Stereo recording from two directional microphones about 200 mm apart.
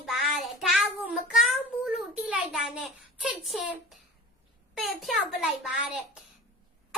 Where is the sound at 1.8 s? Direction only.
5° right (ahead or behind).